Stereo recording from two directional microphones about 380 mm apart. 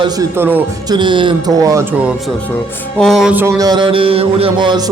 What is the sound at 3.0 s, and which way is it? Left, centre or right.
A man's voice, centre.